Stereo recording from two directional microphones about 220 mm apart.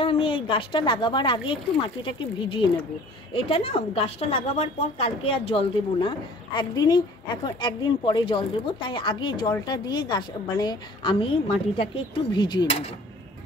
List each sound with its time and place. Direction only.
0.0 s a woman's voice: 25° left (ahead or behind)